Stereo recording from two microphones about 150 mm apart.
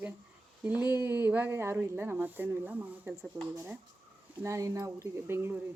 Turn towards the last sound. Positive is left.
turn(degrees=-15)  # may be behind; listen again after turning